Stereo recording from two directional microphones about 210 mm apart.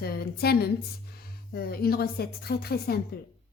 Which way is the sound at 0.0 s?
45° left (ahead or behind).